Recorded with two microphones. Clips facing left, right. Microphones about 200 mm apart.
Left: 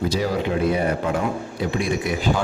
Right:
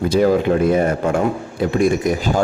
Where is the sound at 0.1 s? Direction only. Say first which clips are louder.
Right 8 dB; 55° right (ahead or behind).